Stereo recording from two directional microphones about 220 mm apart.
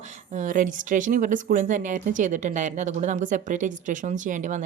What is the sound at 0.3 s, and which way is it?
Speech, 35° right (ahead or behind).